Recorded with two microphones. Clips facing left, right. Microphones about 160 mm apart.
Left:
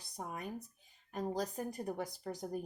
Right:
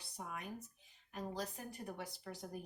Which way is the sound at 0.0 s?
40° left (ahead or behind).